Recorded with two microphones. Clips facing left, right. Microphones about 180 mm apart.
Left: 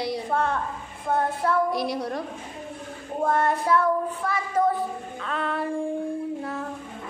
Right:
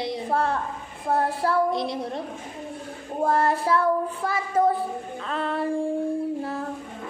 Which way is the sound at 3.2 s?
30° right (ahead or behind).